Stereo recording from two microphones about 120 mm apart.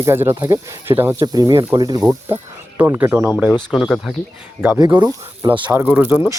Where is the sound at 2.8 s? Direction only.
15° right (ahead or behind).